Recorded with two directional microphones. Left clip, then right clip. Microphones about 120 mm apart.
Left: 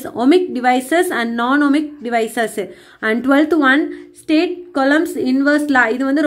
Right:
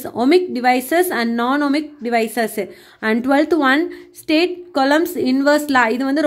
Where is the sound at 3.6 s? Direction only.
35° right (ahead or behind).